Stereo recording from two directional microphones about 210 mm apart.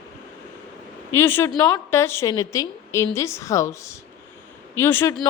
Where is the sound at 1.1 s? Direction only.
10° left (ahead or behind).